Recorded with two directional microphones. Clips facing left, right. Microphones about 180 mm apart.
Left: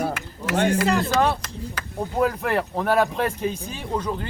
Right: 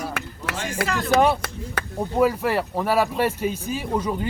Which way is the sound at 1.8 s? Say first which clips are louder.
Right 5 dB; 60° right (ahead or behind).